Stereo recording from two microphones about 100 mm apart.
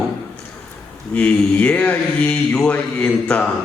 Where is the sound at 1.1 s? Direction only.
15° left (ahead or behind).